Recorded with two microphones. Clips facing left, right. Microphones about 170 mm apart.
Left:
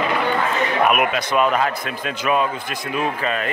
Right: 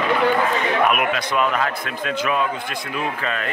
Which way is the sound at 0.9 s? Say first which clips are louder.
Left 2 dB; 20° left (ahead or behind).